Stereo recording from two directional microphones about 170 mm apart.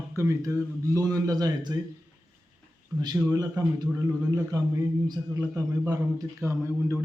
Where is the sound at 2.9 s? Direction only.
20° right (ahead or behind).